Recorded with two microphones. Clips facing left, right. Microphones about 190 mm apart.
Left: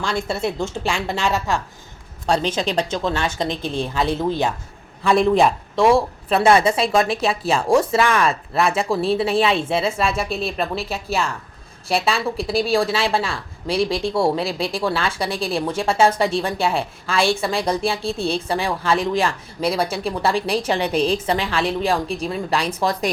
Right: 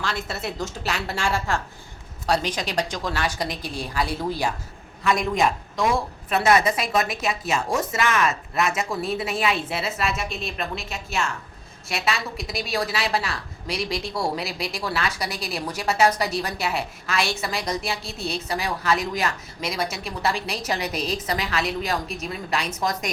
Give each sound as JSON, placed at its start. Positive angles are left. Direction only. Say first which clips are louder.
{"t": 0.3, "sound": "a woman's voice", "louder": "left 7 dB", "side_deg": 30}
{"t": 2.2, "sound": "a woman's voice", "louder": "left 4 dB", "side_deg": 30}